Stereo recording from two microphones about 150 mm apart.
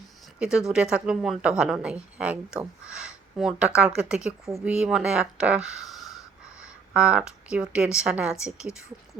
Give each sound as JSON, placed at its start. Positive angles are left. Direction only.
{"t": 0.3, "sound": "a woman's voice", "side_deg": -5}